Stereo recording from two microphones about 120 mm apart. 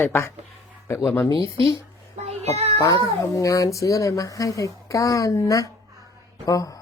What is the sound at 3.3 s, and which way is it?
Speech, 30° left (ahead or behind).